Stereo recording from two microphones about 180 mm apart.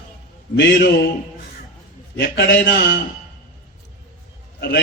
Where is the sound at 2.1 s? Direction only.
70° left (ahead or behind).